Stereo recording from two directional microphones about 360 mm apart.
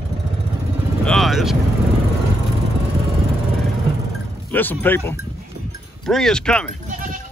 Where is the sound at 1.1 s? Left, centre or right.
Centre.